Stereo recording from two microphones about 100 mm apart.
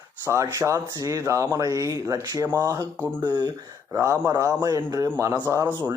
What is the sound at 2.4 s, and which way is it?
Speech, 25° right (ahead or behind).